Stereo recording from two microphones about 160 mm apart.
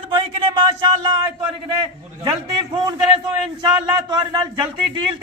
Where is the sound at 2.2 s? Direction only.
30° right (ahead or behind).